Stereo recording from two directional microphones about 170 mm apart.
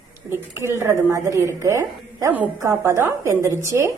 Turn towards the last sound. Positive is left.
turn(degrees=-15)  # may be behind; listen again after turning